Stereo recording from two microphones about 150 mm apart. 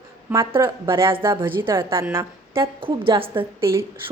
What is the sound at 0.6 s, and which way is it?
A woman's voice, 20° right (ahead or behind).